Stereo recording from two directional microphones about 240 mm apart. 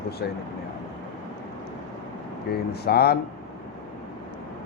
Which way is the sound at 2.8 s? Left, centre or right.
Left.